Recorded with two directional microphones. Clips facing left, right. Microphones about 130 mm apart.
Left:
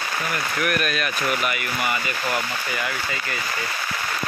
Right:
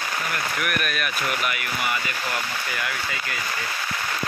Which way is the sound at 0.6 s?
5° right (ahead or behind).